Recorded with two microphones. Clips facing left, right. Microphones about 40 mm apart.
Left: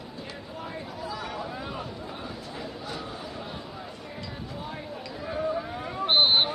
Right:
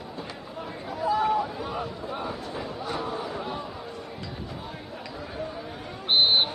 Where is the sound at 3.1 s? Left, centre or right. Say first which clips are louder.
Right 6 dB; right.